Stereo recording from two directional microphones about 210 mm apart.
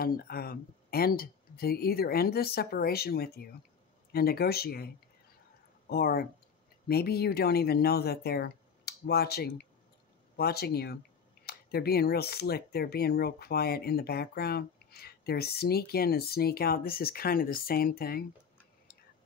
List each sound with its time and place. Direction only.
0.0 s speech: 45° left (ahead or behind)